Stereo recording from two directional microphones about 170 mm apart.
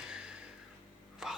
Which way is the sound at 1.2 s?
5° right (ahead or behind).